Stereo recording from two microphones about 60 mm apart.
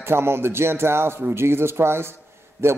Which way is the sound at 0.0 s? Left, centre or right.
Right.